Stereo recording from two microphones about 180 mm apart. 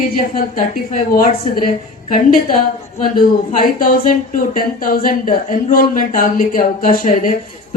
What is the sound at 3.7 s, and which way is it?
A woman's voice, 50° left (ahead or behind).